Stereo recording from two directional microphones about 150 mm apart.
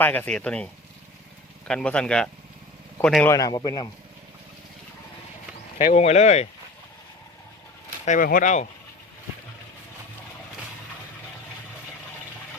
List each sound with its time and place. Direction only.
0.0 s speech: 10° left (ahead or behind)
3.2 s a man's voice: 20° left (ahead or behind)
5.7 s speech: 40° left (ahead or behind)
8.0 s speech: 65° left (ahead or behind)